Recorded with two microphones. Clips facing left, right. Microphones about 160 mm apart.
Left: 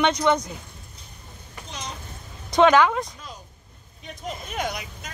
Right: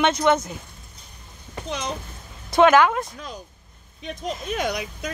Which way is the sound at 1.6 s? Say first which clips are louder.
Right 8 dB; 65° right (ahead or behind).